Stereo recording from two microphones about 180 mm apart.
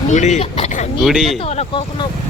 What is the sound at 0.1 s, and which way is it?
Speech, 40° left (ahead or behind).